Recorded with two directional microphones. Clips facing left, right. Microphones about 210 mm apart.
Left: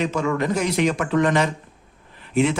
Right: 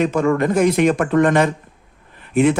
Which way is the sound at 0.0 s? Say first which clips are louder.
Right 5 dB; 55° right (ahead or behind).